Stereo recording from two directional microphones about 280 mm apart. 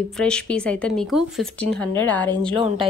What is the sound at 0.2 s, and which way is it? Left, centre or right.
Speech, centre.